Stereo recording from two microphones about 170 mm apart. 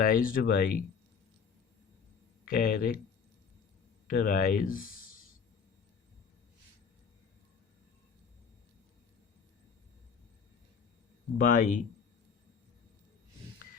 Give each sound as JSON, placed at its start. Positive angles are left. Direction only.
{"t": 0.0, "sound": "speech", "side_deg": 55}
{"t": 2.4, "sound": "speech", "side_deg": 60}
{"t": 4.0, "sound": "speech", "side_deg": 60}
{"t": 11.3, "sound": "speech", "side_deg": 50}